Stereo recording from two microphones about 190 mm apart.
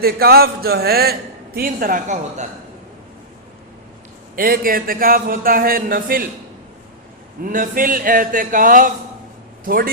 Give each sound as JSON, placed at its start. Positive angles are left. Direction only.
{"t": 0.0, "sound": "speech", "side_deg": -55}
{"t": 4.4, "sound": "speech", "side_deg": -50}
{"t": 7.4, "sound": "speech", "side_deg": -45}